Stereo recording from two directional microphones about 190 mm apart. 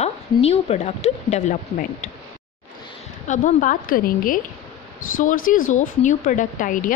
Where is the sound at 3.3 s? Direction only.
45° left (ahead or behind).